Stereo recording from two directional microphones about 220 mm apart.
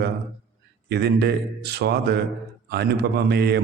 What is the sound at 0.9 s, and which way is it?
A man's voice, 45° right (ahead or behind).